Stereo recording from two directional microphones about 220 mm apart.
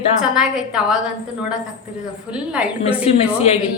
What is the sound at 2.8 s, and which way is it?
Speech, 25° left (ahead or behind).